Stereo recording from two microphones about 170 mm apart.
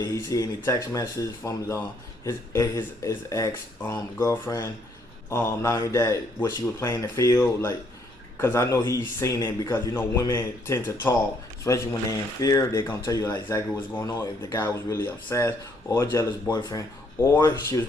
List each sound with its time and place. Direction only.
0.0 s speech: 20° left (ahead or behind)